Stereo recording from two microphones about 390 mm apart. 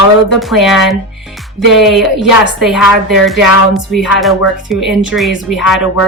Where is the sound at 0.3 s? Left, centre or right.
Centre.